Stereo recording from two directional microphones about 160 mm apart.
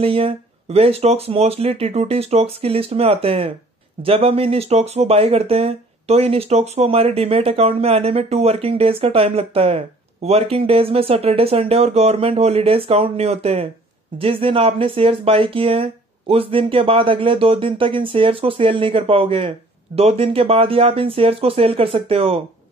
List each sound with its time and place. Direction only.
0.0 s speech: 35° right (ahead or behind)